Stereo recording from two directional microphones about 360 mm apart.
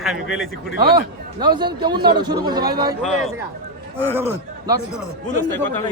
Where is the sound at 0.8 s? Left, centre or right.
Centre.